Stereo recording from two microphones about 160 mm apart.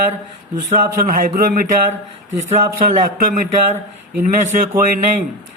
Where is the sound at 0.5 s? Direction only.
55° right (ahead or behind).